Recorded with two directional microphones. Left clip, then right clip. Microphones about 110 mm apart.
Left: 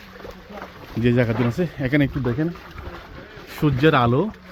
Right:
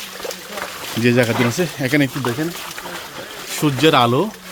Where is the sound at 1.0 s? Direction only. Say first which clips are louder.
Right 5 dB; 20° right (ahead or behind).